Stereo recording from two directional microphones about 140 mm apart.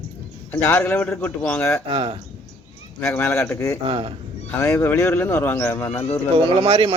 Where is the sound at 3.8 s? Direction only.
40° right (ahead or behind).